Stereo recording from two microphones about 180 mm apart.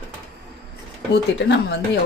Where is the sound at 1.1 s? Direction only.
75° left (ahead or behind).